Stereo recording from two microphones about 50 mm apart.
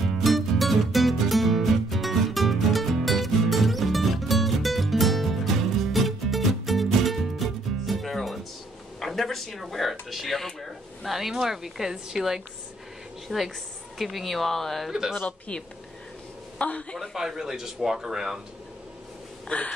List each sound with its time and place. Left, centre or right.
0.2 s music: centre
9.0 s a sound: centre
13.3 s speech: centre
14.9 s speech: centre
15.2 s a man's voice: left
17.1 s speech: centre